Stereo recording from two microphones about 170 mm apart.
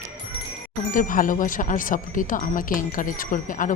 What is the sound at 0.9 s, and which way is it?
Speech, 55° left (ahead or behind).